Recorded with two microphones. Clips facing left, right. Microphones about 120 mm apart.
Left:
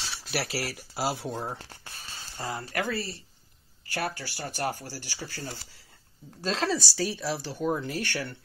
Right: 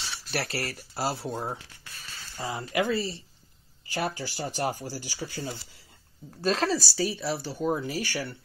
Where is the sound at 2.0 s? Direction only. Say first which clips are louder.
Even; 25° left (ahead or behind).